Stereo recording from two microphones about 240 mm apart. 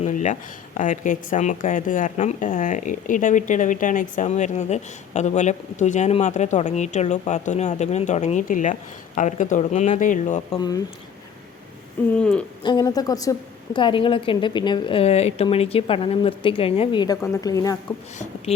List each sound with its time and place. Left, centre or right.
0.0 s speech: left
12.1 s speech: centre
12.6 s a woman's voice: centre